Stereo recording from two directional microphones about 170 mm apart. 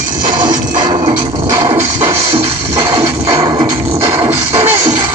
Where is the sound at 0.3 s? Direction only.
25° right (ahead or behind).